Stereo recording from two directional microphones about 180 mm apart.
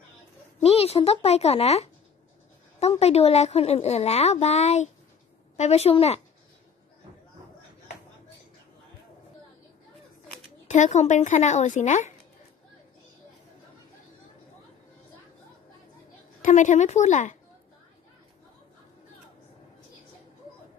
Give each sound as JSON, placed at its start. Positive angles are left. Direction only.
{"t": 0.6, "sound": "a woman's voice", "side_deg": 35}
{"t": 10.7, "sound": "a woman's voice", "side_deg": 40}
{"t": 16.3, "sound": "a woman's voice", "side_deg": 45}